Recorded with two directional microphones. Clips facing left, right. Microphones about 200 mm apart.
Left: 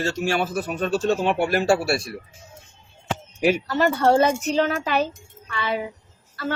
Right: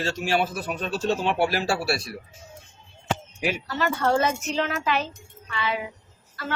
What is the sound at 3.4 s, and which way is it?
Speech, 45° left (ahead or behind).